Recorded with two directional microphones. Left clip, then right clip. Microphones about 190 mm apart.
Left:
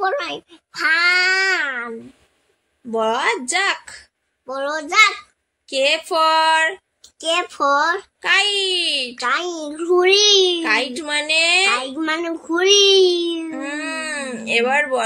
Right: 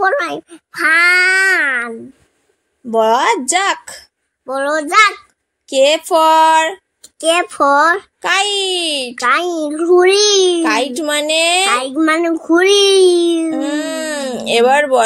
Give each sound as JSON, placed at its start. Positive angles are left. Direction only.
{"t": 0.0, "sound": "a child's voice", "side_deg": -35}